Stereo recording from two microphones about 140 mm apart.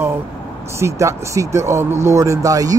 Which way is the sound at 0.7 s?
20° right (ahead or behind).